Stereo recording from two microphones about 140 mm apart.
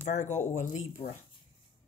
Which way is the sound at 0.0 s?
55° left (ahead or behind).